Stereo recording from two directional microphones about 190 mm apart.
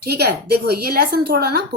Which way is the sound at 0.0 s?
55° right (ahead or behind).